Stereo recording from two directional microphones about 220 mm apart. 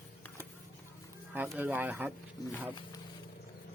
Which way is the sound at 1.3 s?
5° right (ahead or behind).